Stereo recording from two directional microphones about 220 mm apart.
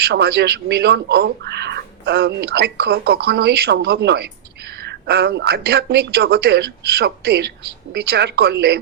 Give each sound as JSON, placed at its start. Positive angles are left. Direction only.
{"t": 0.0, "sound": "speech", "side_deg": -45}